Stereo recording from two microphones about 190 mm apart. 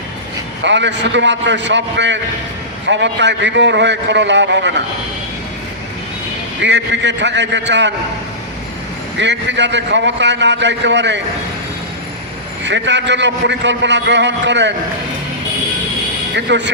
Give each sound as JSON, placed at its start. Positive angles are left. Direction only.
{"t": 0.6, "sound": "a man's voice", "side_deg": -70}
{"t": 6.6, "sound": "a man's voice", "side_deg": -70}
{"t": 9.1, "sound": "a man's voice", "side_deg": -70}
{"t": 12.6, "sound": "a man's voice", "side_deg": -70}
{"t": 16.3, "sound": "a man's voice", "side_deg": -65}